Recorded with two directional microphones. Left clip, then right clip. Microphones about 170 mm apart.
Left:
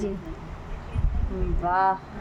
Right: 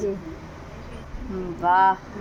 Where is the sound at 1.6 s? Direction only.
25° right (ahead or behind).